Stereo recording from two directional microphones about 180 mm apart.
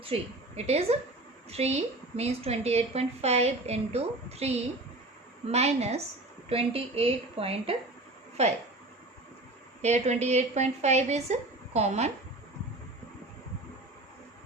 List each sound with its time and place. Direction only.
0.0 s a woman's voice: 35° right (ahead or behind)
9.8 s a woman's voice: 40° right (ahead or behind)